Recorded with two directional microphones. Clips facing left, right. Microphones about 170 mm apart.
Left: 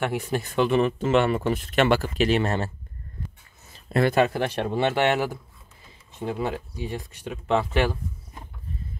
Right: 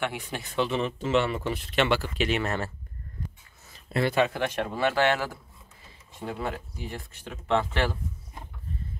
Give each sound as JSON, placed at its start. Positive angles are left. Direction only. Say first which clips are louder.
{"t": 0.0, "sound": "speech", "louder": "left 6 dB", "side_deg": 45}
{"t": 3.9, "sound": "speech", "louder": "left 4 dB", "side_deg": 45}